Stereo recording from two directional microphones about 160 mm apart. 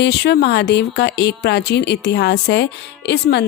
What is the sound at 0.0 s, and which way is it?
Speech, 90° left.